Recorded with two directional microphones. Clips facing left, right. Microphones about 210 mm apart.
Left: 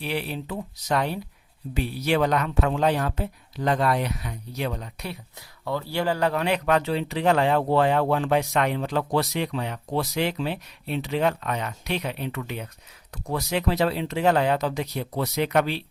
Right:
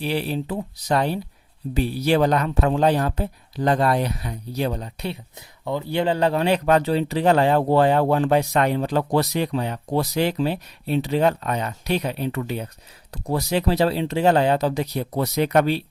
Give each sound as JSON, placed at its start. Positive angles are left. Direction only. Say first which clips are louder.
{"t": 0.0, "sound": "speech", "louder": "right 5 dB", "side_deg": -35}
{"t": 5.6, "sound": "speech", "louder": "right 3 dB", "side_deg": -20}